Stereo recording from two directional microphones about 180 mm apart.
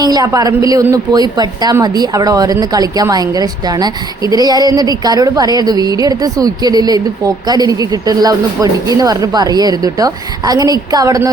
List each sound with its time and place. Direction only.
0.0 s a woman's voice: 20° right (ahead or behind)